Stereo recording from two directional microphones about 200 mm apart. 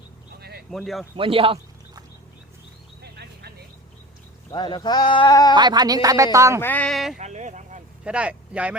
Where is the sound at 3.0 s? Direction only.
55° right (ahead or behind).